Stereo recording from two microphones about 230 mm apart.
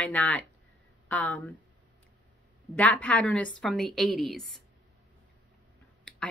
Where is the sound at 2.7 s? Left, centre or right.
Centre.